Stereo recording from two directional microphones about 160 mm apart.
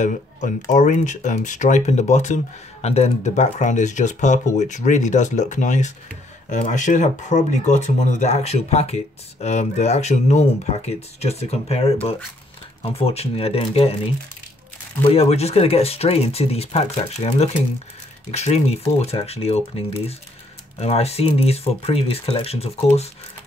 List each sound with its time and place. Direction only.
0.7 s speech: 50° left (ahead or behind)
15.0 s speech: 40° left (ahead or behind)